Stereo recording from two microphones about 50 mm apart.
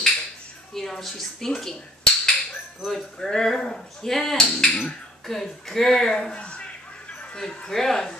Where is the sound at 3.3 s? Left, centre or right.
Centre.